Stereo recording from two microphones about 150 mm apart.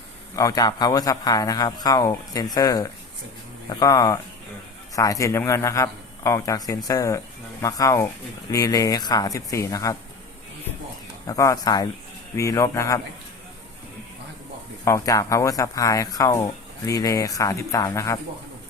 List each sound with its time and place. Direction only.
0.3 s speech: 25° left (ahead or behind)
11.3 s speech: 25° left (ahead or behind)
14.8 s speech: 20° left (ahead or behind)